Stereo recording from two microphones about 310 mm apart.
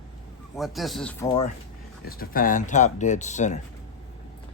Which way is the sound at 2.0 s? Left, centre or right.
Left.